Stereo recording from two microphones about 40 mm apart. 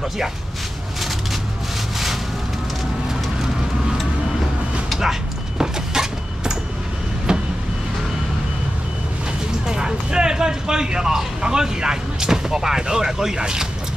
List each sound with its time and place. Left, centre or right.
5.6 s cupboard open or close: centre
7.3 s vehicle: centre
9.7 s speech: centre